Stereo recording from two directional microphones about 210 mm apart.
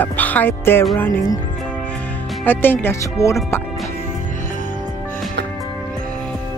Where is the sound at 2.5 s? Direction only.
10° left (ahead or behind).